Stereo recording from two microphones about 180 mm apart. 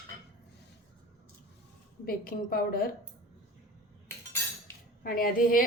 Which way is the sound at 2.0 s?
55° left (ahead or behind).